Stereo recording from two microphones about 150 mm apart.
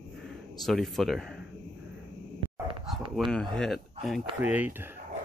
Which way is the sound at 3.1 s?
5° left (ahead or behind).